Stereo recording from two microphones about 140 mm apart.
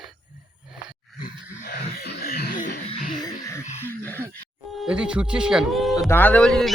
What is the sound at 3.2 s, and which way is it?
Music, 25° left (ahead or behind).